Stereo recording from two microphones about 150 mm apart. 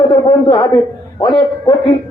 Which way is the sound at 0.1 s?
30° left (ahead or behind).